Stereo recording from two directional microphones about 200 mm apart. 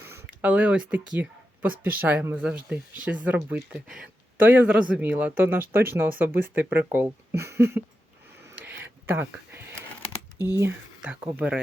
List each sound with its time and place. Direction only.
0.0 s speech: 10° right (ahead or behind)
8.4 s a sound: 10° right (ahead or behind)
10.3 s speech: 20° left (ahead or behind)
10.6 s speech: 10° right (ahead or behind)